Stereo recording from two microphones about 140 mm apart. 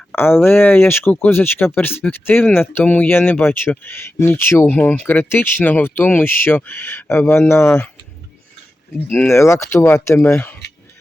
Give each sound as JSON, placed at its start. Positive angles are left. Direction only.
{"t": 0.1, "sound": "speech", "side_deg": 15}
{"t": 9.0, "sound": "speech", "side_deg": 15}